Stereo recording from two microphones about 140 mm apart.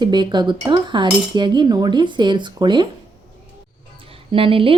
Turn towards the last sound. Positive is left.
turn(degrees=-40)  # may be behind; listen again after turning